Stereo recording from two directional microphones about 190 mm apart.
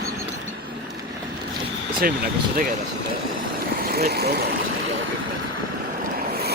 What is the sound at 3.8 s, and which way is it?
Speech, 55° right (ahead or behind).